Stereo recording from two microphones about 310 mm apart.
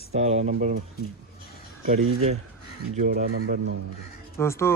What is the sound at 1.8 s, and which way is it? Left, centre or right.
Speech, right.